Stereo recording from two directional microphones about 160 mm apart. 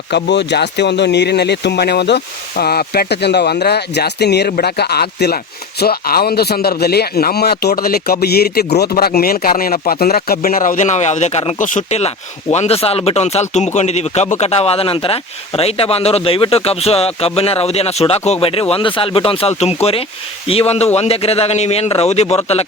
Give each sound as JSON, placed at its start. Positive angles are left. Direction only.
{"t": 0.1, "sound": "speech", "side_deg": 90}
{"t": 5.8, "sound": "speech", "side_deg": 70}